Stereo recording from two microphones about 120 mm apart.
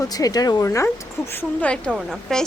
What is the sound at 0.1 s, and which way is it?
Speech, 30° left (ahead or behind).